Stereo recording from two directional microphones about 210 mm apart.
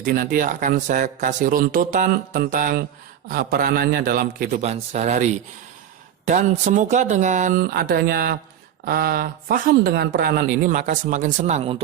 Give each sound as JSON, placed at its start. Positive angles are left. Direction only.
{"t": 0.0, "sound": "speech", "side_deg": -40}
{"t": 4.6, "sound": "speech", "side_deg": -30}